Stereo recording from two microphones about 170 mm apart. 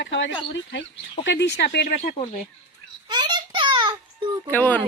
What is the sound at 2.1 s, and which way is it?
Speech, 35° left (ahead or behind).